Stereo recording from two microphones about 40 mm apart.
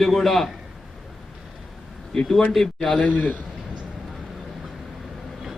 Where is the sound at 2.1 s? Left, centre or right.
Centre.